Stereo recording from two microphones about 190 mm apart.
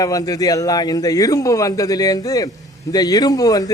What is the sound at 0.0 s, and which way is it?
A man's voice, 20° left (ahead or behind).